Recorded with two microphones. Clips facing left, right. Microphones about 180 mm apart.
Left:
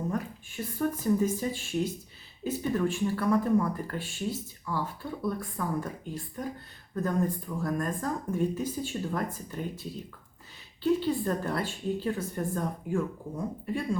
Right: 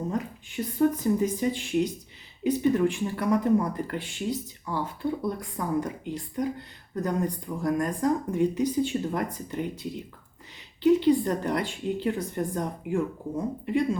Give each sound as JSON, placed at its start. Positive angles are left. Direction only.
{"t": 0.1, "sound": "speech", "side_deg": -20}
{"t": 10.8, "sound": "speech", "side_deg": -20}